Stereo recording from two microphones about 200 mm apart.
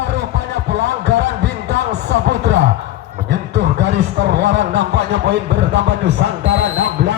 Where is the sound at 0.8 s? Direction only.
60° right (ahead or behind).